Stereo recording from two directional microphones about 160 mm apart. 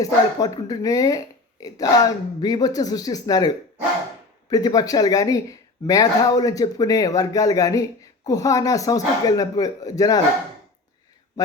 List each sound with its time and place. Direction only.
0.0 s speech: 25° left (ahead or behind)
11.4 s a man's voice: 25° left (ahead or behind)